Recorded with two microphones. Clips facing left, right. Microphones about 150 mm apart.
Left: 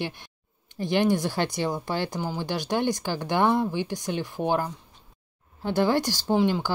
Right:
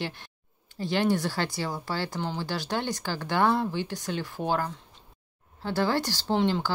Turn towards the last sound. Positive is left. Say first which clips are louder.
# left 2 dB
turn(degrees=10)  # may be behind; listen again after turning